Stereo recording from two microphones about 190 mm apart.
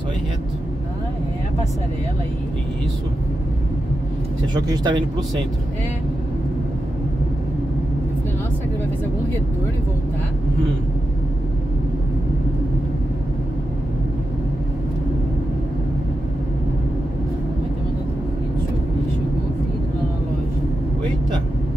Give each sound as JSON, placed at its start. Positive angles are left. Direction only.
{"t": 4.6, "sound": "speech", "side_deg": -20}